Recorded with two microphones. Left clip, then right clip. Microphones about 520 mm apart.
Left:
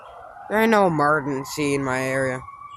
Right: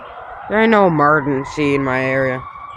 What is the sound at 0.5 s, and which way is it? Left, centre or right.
Speech, left.